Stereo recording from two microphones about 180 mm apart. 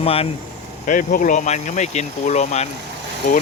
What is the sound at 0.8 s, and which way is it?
Speech, 50° left (ahead or behind).